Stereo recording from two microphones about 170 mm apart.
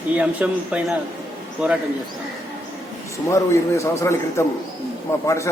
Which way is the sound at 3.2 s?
15° left (ahead or behind).